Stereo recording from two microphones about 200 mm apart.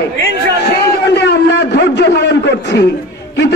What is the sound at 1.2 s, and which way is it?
A man's voice, 60° left (ahead or behind).